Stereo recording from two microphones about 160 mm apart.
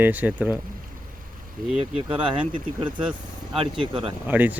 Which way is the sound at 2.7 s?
30° right (ahead or behind).